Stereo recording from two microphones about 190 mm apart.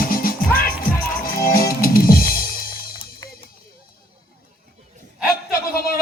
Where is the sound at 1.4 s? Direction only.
50° left (ahead or behind).